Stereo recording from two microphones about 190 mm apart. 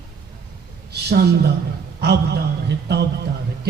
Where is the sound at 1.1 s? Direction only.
60° right (ahead or behind).